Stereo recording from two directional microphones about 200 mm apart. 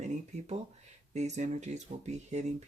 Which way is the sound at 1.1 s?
35° right (ahead or behind).